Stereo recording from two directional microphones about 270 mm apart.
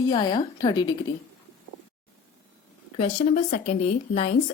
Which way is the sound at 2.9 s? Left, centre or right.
Left.